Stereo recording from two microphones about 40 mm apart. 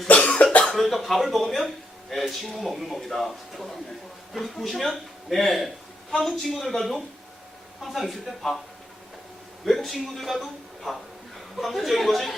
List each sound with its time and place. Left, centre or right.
0.1 s cough: left
0.7 s speech: centre
9.6 s speech: centre